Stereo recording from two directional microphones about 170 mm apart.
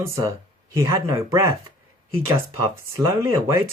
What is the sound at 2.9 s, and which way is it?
Speech, 20° right (ahead or behind).